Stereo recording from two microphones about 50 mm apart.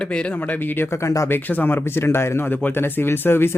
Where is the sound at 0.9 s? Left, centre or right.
Left.